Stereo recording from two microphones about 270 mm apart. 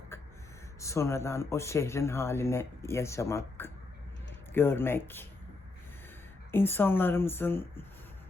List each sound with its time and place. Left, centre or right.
0.1 s gasp: centre
0.8 s speech: centre
6.5 s speech: centre